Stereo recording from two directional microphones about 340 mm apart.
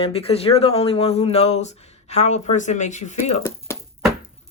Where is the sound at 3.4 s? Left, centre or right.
Centre.